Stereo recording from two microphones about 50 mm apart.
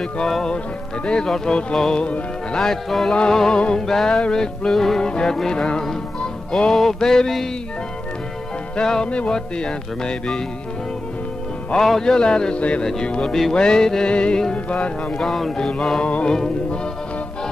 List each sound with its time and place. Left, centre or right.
0.3 s music: centre
3.1 s music: centre
8.8 s music: centre
11.7 s music: centre
15.2 s music: centre
16.0 s music: left